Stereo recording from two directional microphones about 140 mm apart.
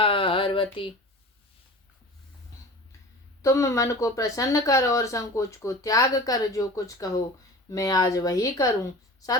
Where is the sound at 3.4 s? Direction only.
20° left (ahead or behind).